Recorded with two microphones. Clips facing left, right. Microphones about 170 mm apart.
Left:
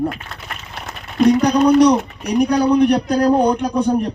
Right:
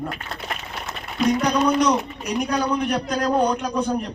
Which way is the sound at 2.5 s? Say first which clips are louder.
Left 9 dB; 35° left (ahead or behind).